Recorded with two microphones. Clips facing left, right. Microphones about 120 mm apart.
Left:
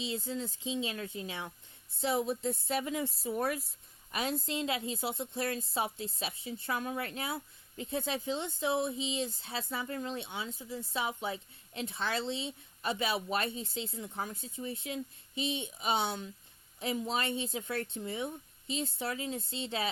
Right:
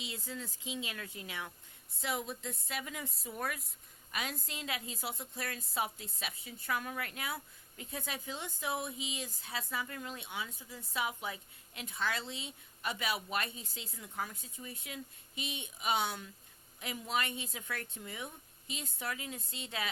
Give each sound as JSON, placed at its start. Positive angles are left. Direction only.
{"t": 0.0, "sound": "a woman's voice", "side_deg": 25}